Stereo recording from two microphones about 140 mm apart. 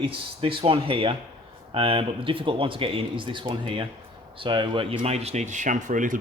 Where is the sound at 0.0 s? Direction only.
40° right (ahead or behind).